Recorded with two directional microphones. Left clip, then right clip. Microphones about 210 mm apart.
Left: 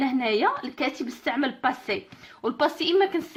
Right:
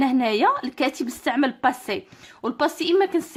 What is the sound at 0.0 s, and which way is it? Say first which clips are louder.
Speech: right 4 dB; 30° right (ahead or behind).